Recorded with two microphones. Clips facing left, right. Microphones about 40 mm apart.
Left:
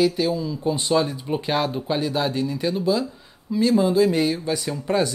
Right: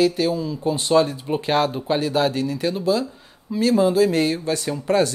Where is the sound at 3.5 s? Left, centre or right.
Centre.